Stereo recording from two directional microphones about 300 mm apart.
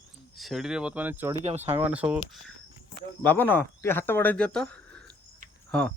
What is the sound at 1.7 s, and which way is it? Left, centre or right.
Speech, centre.